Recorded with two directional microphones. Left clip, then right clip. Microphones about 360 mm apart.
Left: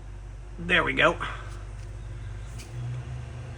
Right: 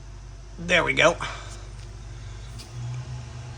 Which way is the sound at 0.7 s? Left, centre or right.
Centre.